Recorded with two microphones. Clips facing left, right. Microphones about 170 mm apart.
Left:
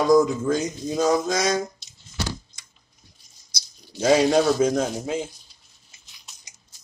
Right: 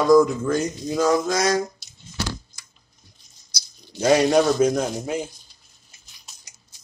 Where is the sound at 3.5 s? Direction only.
25° left (ahead or behind).